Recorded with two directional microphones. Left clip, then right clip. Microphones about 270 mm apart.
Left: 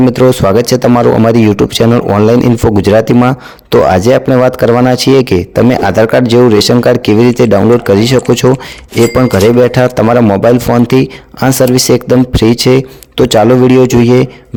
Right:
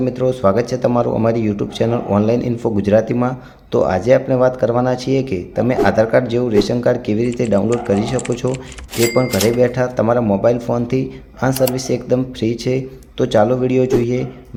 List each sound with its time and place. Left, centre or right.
0.1 s a man's voice: left
9.6 s a man's voice: left